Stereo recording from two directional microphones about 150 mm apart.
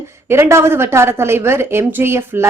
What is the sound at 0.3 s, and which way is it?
A woman's voice, 15° right (ahead or behind).